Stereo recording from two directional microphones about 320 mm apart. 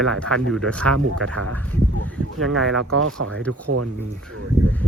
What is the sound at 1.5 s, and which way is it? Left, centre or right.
Speech, centre.